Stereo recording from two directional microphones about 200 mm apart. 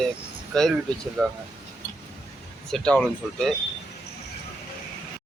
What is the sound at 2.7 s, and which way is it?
Speech, 5° left (ahead or behind).